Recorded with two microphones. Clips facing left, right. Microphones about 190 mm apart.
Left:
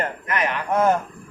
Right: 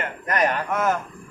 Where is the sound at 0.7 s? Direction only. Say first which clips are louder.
Left 4 dB; 30° left (ahead or behind).